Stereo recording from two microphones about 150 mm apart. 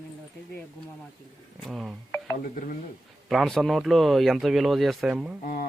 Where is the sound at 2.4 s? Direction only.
65° left (ahead or behind).